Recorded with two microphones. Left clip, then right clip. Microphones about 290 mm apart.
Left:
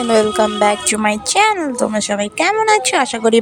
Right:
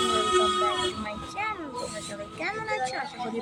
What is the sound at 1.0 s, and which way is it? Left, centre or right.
Speech, left.